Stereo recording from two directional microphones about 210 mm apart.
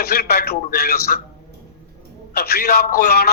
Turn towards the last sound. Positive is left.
turn(degrees=50)  # may be behind; listen again after turning